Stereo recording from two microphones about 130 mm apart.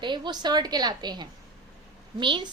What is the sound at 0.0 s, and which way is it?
A woman's voice, 35° right (ahead or behind).